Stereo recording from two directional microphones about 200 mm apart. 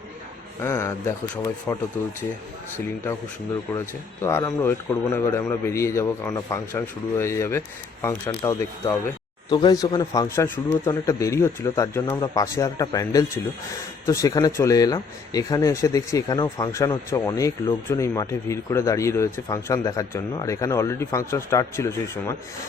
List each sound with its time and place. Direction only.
0.6 s speech: 15° left (ahead or behind)
3.7 s speech: 15° left (ahead or behind)